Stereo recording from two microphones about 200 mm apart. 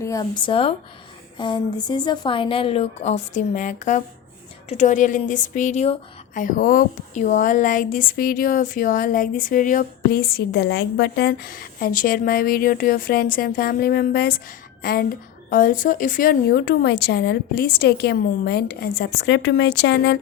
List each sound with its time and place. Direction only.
0.0 s a woman's voice: 15° left (ahead or behind); by 20.1 s 55° left (ahead or behind)